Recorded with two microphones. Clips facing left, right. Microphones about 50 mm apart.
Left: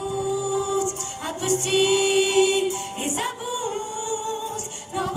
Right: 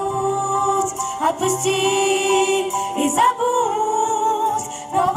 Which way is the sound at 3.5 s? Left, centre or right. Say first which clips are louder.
Right 10 dB; right.